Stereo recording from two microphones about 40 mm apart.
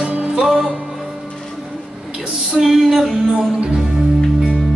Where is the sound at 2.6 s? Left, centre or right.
Centre.